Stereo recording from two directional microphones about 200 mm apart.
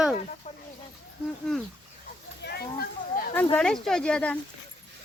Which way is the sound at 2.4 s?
50° left (ahead or behind).